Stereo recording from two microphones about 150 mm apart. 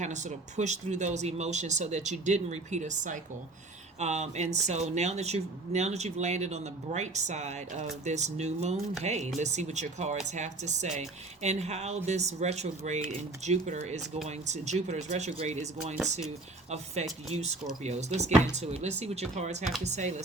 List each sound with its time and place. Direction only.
0.0 s speech: 50° right (ahead or behind)